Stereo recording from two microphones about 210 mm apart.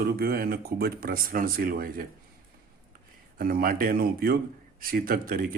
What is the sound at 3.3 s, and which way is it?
A man's voice, 45° right (ahead or behind).